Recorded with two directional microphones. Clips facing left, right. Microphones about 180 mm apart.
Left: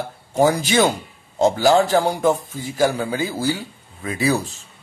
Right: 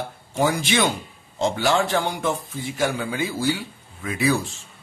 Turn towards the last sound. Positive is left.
turn(degrees=35)  # may be behind; listen again after turning